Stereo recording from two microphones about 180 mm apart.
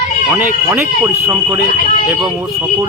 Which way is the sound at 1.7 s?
45° left (ahead or behind).